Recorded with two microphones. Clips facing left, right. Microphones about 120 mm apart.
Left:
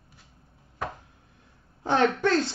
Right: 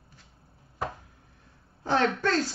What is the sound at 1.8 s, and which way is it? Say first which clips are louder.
Speech: left 3 dB; 20° left (ahead or behind).